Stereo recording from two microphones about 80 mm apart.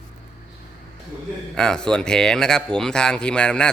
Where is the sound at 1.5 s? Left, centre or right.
Centre.